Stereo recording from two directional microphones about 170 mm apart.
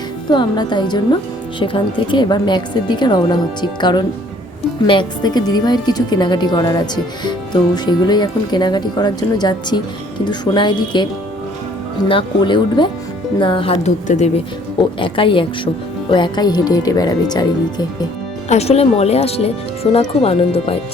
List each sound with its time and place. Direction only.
0.3 s speech: 25° left (ahead or behind); by 14.3 s 40° left (ahead or behind)
14.9 s speech: 30° left (ahead or behind)
18.4 s speech: 40° left (ahead or behind)